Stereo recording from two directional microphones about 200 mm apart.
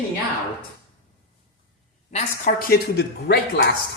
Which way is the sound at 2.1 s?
45° left (ahead or behind).